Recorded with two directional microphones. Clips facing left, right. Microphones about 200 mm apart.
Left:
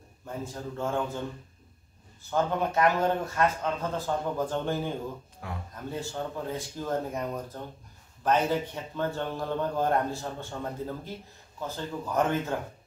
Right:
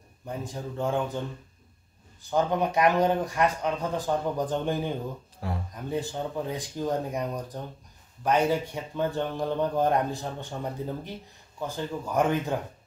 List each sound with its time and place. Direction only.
0.4 s a man's voice: 15° right (ahead or behind)
2.3 s a man's voice: 15° right (ahead or behind)
5.4 s a man's voice: 35° right (ahead or behind)
5.9 s a man's voice: 15° right (ahead or behind)